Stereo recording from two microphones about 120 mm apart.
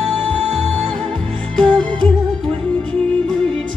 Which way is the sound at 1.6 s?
5° left (ahead or behind).